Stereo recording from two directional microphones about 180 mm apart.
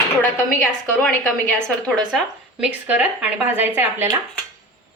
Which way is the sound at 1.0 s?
10° left (ahead or behind).